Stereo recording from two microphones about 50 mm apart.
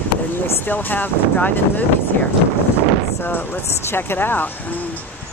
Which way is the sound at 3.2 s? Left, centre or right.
Left.